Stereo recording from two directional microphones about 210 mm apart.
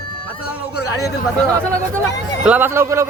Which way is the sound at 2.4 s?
10° right (ahead or behind).